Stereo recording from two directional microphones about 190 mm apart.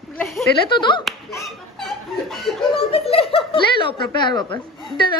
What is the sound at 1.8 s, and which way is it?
Chuckle, centre (ahead or behind).